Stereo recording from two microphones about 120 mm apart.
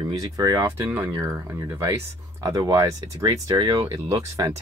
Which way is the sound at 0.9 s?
15° right (ahead or behind).